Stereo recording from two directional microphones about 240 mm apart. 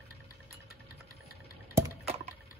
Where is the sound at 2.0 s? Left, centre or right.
Right.